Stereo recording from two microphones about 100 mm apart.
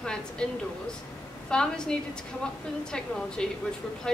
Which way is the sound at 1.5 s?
10° left (ahead or behind).